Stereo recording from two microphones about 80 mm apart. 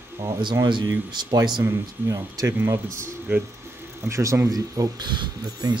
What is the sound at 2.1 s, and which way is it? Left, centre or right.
Speech, right.